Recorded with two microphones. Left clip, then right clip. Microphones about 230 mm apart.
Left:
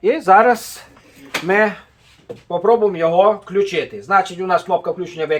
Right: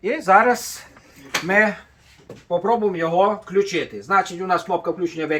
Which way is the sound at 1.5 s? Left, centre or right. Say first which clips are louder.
Left 2 dB; left.